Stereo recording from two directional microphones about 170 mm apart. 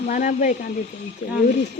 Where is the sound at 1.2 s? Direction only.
90° left.